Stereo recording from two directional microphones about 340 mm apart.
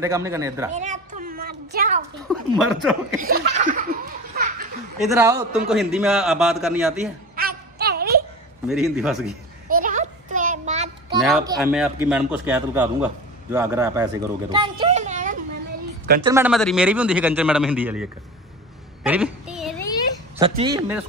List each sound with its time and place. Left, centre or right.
0.0 s speech: centre
0.7 s a sound: right
2.2 s speech: centre
3.2 s laughter: right
5.0 s a man's voice: centre
7.3 s a sound: right
8.6 s a man's voice: centre
9.8 s a sound: right
11.1 s a man's voice: centre; by 15.3 s right
16.3 s a man's voice: centre
19.0 s a sound: centre
20.3 s speech: centre